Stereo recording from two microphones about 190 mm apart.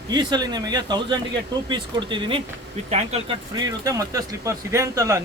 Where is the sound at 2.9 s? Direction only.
35° right (ahead or behind).